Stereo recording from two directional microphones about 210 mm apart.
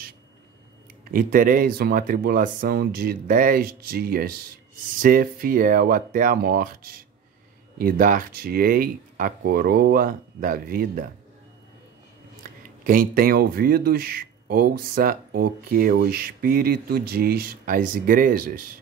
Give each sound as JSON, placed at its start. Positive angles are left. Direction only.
{"t": 1.1, "sound": "speech", "side_deg": -40}
{"t": 12.4, "sound": "speech", "side_deg": -40}